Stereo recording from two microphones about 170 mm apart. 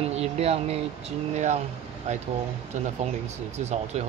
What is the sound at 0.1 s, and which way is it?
Speech, 35° right (ahead or behind).